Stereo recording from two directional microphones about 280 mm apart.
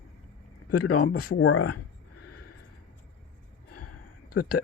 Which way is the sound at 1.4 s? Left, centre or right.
Left.